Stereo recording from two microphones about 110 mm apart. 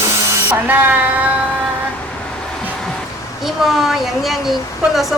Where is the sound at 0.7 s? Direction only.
15° right (ahead or behind).